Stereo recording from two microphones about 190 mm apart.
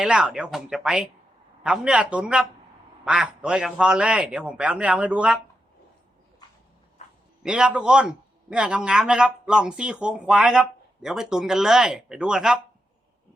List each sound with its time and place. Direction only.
0.0 s a man's voice: 5° right (ahead or behind)
7.4 s a man's voice: 5° right (ahead or behind)